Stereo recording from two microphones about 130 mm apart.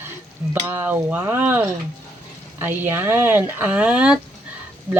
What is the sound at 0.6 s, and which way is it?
Speech, 15° right (ahead or behind).